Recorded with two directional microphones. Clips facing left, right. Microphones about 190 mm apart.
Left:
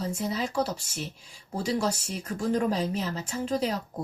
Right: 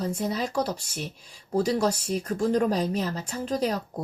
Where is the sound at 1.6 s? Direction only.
40° right (ahead or behind).